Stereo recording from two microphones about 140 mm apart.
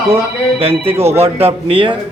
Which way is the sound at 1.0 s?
45° right (ahead or behind).